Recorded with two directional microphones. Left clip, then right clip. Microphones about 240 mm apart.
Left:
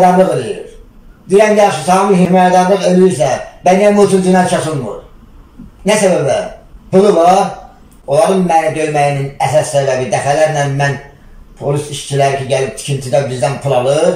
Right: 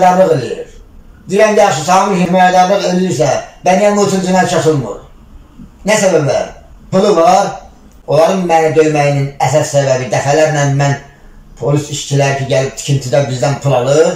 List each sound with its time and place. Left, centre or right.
0.0 s a man's voice: centre
1.4 s a man's voice: centre
5.9 s a man's voice: centre